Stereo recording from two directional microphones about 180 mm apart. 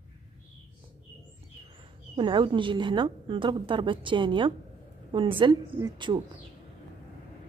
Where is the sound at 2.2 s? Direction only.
25° right (ahead or behind).